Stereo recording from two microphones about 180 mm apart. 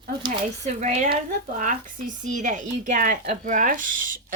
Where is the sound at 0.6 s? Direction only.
40° right (ahead or behind).